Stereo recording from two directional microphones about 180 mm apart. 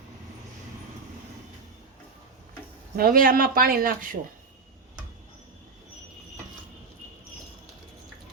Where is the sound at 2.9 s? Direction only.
55° right (ahead or behind).